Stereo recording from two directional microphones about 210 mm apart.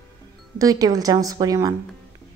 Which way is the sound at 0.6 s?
15° right (ahead or behind).